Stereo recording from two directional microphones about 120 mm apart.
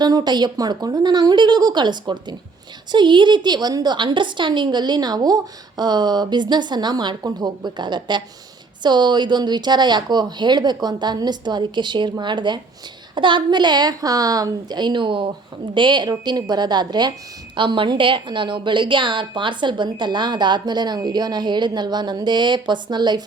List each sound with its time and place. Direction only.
0.0 s a woman's voice: 35° right (ahead or behind)